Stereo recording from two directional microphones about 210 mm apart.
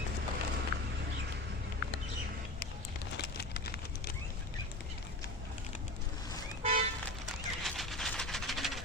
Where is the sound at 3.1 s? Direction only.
50° left (ahead or behind).